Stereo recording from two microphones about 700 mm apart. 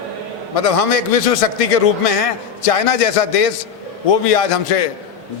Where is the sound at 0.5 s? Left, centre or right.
Left.